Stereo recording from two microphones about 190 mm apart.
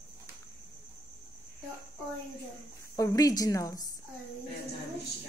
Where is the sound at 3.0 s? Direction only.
20° left (ahead or behind).